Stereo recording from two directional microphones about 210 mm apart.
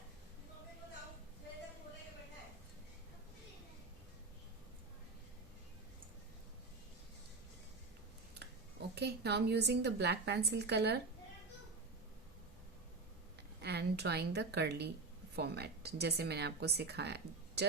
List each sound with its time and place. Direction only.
8.4 s speech: 50° right (ahead or behind)
13.6 s a woman's voice: 50° right (ahead or behind)